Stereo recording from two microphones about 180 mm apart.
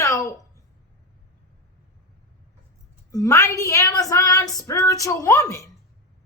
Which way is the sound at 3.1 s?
20° left (ahead or behind).